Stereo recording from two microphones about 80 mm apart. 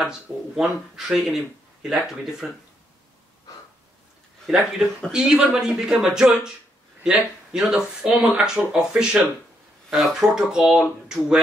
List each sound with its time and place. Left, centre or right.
0.6 s speech: centre
4.5 s speech: centre